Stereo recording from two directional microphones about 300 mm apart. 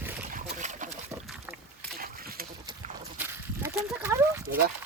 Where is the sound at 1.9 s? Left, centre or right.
Right.